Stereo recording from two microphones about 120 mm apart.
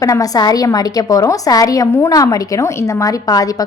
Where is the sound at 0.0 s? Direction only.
30° left (ahead or behind).